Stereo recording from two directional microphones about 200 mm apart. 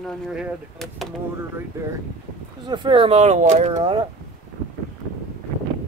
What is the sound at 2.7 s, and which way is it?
Speech, 25° right (ahead or behind).